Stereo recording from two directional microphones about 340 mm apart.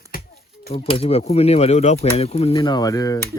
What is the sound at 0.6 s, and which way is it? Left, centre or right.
Speech, centre.